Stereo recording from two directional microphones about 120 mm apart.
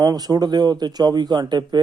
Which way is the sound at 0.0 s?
30° right (ahead or behind).